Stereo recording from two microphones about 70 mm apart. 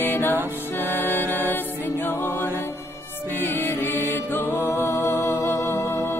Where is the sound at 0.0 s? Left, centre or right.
Left.